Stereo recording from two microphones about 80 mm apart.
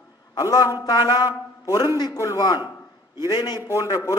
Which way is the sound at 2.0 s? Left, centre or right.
Left.